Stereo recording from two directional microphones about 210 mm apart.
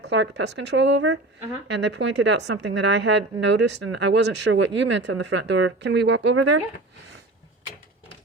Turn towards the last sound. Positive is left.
turn(degrees=-70)  # may be behind; listen again after turning